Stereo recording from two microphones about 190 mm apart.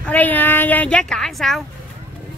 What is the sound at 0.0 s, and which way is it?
Speech, 10° left (ahead or behind).